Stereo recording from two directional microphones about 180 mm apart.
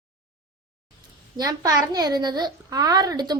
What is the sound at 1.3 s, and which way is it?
A child's voice, 20° right (ahead or behind).